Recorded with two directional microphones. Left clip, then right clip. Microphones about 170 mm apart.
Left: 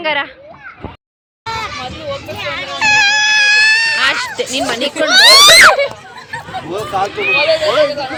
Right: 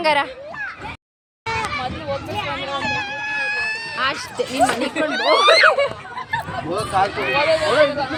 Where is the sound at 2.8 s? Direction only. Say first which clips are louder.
Left 13 dB; 90° left; by 3.9 s 55° left (ahead or behind).